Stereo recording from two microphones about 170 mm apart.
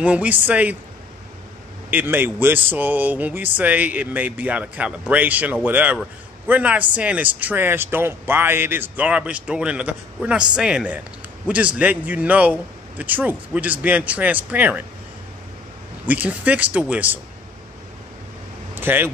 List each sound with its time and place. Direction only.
0.0 s a man's voice: 10° right (ahead or behind)
1.9 s a man's voice: 10° right (ahead or behind)
16.1 s a man's voice: 10° right (ahead or behind)
18.8 s speech: 10° right (ahead or behind)